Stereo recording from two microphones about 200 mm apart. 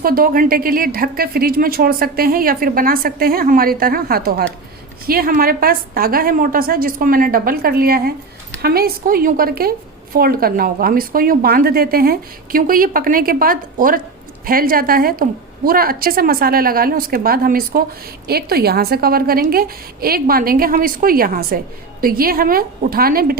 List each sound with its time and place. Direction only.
0.0 s a woman's voice: 45° right (ahead or behind)